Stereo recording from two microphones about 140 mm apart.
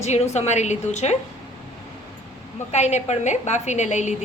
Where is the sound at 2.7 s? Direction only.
55° left (ahead or behind).